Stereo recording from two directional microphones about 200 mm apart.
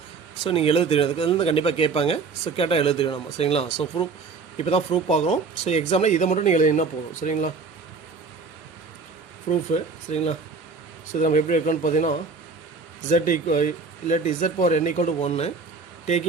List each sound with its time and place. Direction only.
0.4 s speech: 30° left (ahead or behind)
9.5 s speech: 35° left (ahead or behind)